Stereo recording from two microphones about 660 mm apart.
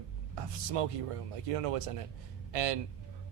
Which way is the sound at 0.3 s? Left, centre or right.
Right.